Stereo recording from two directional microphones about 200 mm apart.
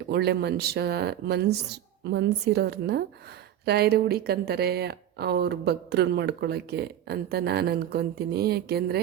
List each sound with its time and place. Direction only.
0.1 s a woman's voice: 55° right (ahead or behind)